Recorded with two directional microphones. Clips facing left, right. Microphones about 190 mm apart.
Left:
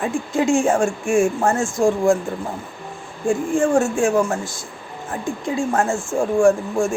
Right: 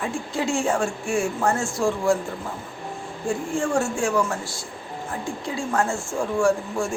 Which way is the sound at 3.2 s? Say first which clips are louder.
Left 7 dB; 50° left (ahead or behind).